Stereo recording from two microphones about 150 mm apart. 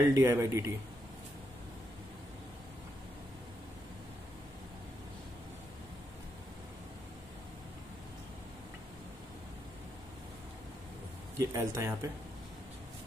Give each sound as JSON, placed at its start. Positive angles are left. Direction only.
{"t": 0.1, "sound": "speech", "side_deg": -15}
{"t": 11.3, "sound": "speech", "side_deg": -20}